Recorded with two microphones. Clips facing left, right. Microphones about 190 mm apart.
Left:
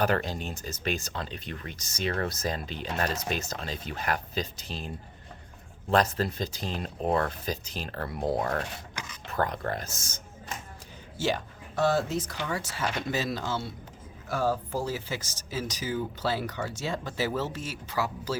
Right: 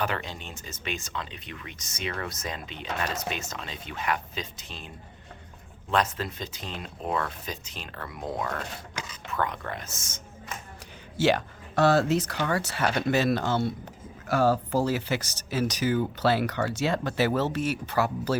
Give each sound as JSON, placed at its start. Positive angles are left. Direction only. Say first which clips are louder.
{"t": 0.0, "sound": "speech", "louder": "left 4 dB", "side_deg": 40}
{"t": 5.9, "sound": "speech", "louder": "left 2 dB", "side_deg": 35}
{"t": 11.2, "sound": "speech", "louder": "right 6 dB", "side_deg": -75}
{"t": 14.3, "sound": "speech", "louder": "right 5 dB", "side_deg": -75}